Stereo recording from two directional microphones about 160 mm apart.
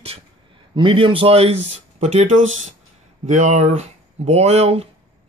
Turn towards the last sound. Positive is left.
turn(degrees=-40)  # may be behind; listen again after turning